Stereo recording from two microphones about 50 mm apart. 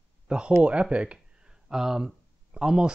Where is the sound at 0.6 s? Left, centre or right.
Right.